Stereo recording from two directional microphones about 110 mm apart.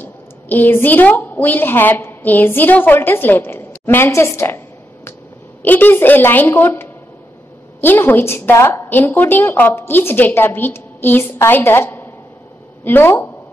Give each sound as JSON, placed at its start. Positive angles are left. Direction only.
{"t": 0.0, "sound": "a woman's voice", "side_deg": 20}
{"t": 5.6, "sound": "a woman's voice", "side_deg": 15}